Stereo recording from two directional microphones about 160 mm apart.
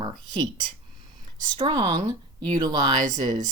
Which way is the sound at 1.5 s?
30° right (ahead or behind).